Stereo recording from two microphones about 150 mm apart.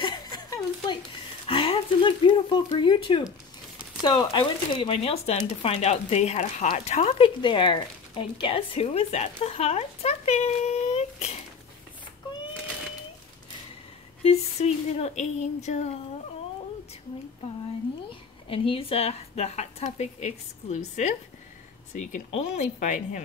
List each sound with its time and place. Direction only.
1.5 s a sound: 35° left (ahead or behind)
4.0 s speech: 30° left (ahead or behind); by 11.3 s 45° left (ahead or behind)
14.2 s speech: 45° left (ahead or behind)
18.5 s speech: 40° left (ahead or behind)
22.3 s speech: 50° left (ahead or behind)